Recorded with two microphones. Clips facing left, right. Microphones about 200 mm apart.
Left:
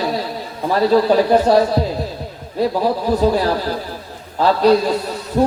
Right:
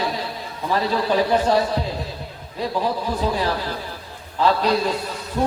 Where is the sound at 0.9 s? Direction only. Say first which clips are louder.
Left 7 dB; 40° left (ahead or behind).